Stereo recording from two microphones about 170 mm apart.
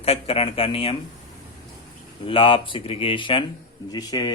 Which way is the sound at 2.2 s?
30° left (ahead or behind).